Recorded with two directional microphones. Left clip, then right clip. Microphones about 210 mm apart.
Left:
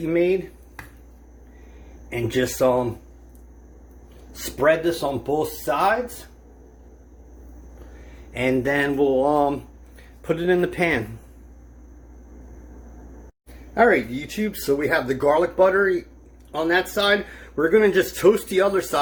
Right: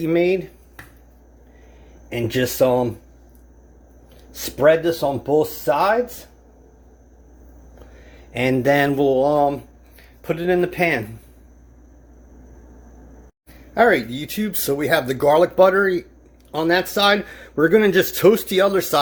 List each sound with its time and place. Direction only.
0.0 s speech: 50° right (ahead or behind)
2.0 s speech: 50° right (ahead or behind)
4.5 s speech: 50° right (ahead or behind)
8.3 s speech: 50° right (ahead or behind)
9.2 s speech: 30° right (ahead or behind)
13.7 s speech: 30° right (ahead or behind)
14.3 s speech: 50° right (ahead or behind)